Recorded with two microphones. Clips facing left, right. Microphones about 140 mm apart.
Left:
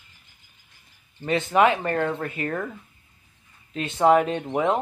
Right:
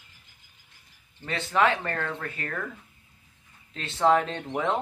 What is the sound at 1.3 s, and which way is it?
Speech, 20° left (ahead or behind).